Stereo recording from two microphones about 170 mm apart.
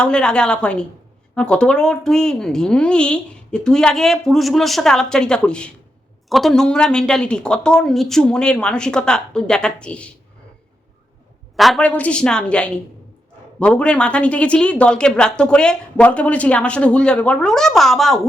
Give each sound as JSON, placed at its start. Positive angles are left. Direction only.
{"t": 0.0, "sound": "a woman's voice", "side_deg": 5}
{"t": 11.5, "sound": "speech", "side_deg": 0}